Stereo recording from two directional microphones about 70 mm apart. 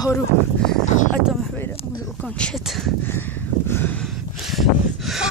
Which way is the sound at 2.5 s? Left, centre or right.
Centre.